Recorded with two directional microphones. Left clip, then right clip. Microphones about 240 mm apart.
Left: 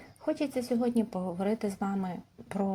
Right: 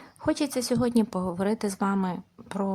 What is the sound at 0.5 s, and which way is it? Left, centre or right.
Speech, centre.